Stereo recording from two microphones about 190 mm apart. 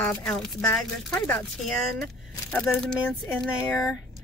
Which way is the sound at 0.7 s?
15° left (ahead or behind).